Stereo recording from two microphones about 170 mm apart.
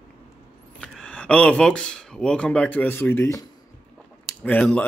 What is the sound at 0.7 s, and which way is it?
Speech, 5° left (ahead or behind).